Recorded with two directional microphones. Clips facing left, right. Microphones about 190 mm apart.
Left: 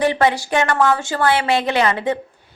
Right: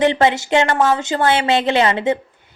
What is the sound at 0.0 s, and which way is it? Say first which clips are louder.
A woman's voice: right 2 dB; 25° right (ahead or behind).